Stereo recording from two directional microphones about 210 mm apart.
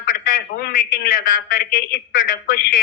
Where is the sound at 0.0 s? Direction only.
40° left (ahead or behind).